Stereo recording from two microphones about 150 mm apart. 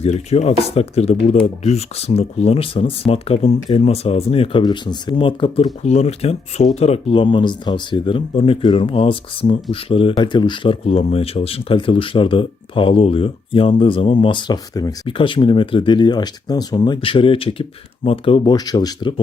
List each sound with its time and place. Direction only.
0.0 s speech: 45° left (ahead or behind)
4.6 s speech: 30° left (ahead or behind)
15.0 s speech: 35° left (ahead or behind)